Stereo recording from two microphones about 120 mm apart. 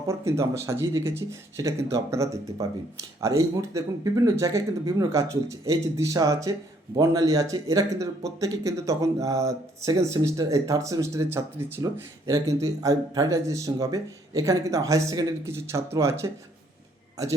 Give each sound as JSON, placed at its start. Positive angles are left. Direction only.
{"t": 0.1, "sound": "speech", "side_deg": -25}